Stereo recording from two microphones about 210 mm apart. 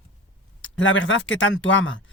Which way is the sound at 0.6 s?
65° left (ahead or behind).